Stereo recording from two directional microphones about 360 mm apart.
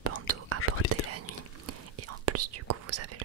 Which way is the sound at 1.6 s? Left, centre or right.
Right.